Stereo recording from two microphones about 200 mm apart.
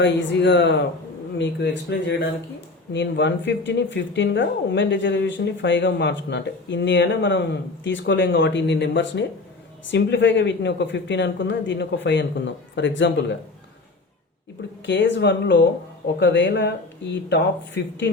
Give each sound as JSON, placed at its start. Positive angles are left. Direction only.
{"t": 0.0, "sound": "speech", "side_deg": 60}
{"t": 14.8, "sound": "speech", "side_deg": 60}